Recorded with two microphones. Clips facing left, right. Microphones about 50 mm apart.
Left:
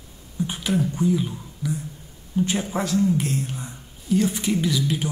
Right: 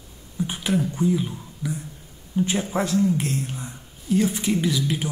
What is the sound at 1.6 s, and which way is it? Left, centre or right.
Speech, right.